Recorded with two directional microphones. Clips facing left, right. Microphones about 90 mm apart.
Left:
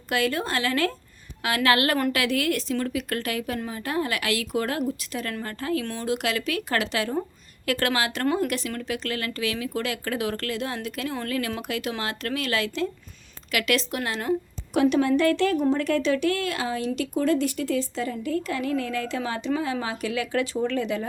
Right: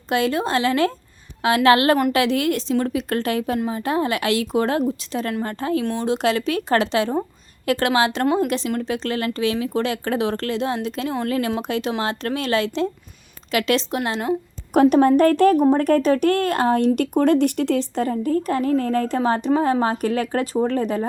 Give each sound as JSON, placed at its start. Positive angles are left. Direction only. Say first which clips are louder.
{"t": 0.1, "sound": "speech", "louder": "right 5 dB", "side_deg": -25}
{"t": 14.7, "sound": "speech", "louder": "right 6 dB", "side_deg": -45}